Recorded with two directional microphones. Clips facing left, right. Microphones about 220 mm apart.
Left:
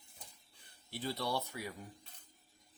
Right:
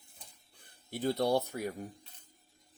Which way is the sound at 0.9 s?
45° right (ahead or behind).